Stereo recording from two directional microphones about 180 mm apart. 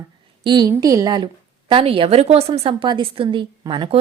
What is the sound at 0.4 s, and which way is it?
A woman's voice, 25° right (ahead or behind).